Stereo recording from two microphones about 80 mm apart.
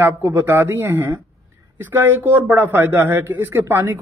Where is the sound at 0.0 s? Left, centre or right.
Right.